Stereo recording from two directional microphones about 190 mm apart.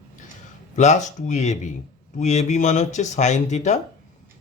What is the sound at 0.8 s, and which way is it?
A man's voice, 40° left (ahead or behind).